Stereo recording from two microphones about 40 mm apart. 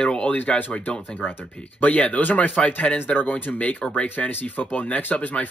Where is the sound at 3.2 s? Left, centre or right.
Left.